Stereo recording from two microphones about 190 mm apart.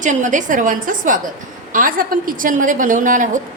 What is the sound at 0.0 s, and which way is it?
A woman's voice, 40° right (ahead or behind).